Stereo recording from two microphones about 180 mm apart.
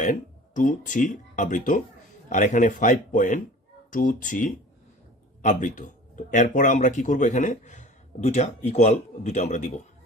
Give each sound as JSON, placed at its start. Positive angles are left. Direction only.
{"t": 0.0, "sound": "speech", "side_deg": 45}